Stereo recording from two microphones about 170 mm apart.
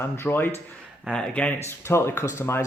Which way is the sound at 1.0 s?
5° left (ahead or behind).